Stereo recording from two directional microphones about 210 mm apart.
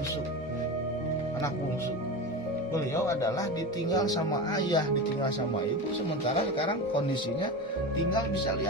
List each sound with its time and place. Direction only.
2.7 s speech: 15° left (ahead or behind)
6.3 s speech: 25° left (ahead or behind)